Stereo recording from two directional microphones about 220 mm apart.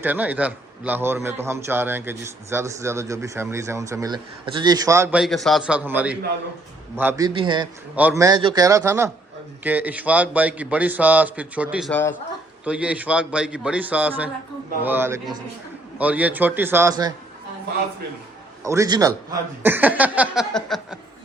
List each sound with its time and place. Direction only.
0.0 s a man's voice: 5° right (ahead or behind)
5.2 s a man's voice: centre (ahead or behind)
7.3 s a man's voice: 20° right (ahead or behind)
7.9 s a man's voice: 10° right (ahead or behind)
11.9 s speech: 5° left (ahead or behind)
12.6 s a man's voice: 5° right (ahead or behind)
18.6 s a man's voice: 15° right (ahead or behind)